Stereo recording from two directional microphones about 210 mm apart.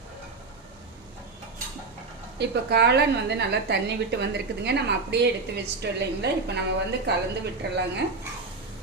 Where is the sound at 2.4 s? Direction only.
50° right (ahead or behind).